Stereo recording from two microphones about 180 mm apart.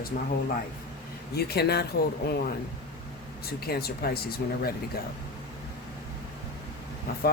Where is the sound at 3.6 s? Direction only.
60° left (ahead or behind).